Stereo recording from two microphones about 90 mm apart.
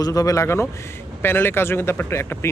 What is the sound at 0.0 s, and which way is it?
Speech, 40° left (ahead or behind).